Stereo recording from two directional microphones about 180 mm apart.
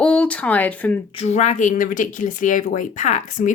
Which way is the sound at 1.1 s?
40° left (ahead or behind).